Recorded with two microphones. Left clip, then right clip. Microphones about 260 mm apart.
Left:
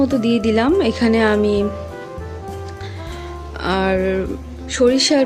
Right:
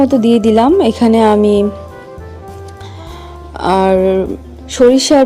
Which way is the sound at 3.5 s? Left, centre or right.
Right.